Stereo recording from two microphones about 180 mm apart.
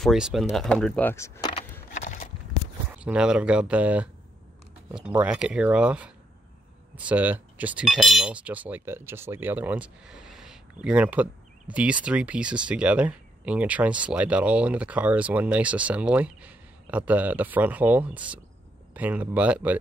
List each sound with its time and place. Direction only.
0.0 s speech: centre (ahead or behind); by 1.5 s 15° left (ahead or behind)
1.9 s a sound: 45° left (ahead or behind)
2.9 s speech: 5° right (ahead or behind)
5.1 s speech: 5° right (ahead or behind)